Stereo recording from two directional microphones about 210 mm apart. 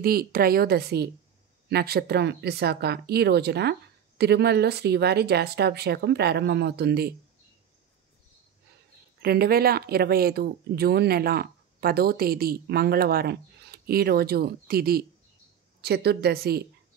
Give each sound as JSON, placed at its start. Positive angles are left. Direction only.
{"t": 0.0, "sound": "speech", "side_deg": -45}
{"t": 9.2, "sound": "speech", "side_deg": -50}